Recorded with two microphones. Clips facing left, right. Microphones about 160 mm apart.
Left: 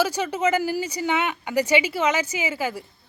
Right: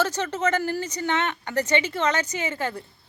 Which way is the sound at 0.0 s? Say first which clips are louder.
Left 2 dB; 10° left (ahead or behind).